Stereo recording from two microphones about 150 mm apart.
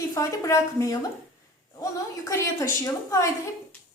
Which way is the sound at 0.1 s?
20° left (ahead or behind).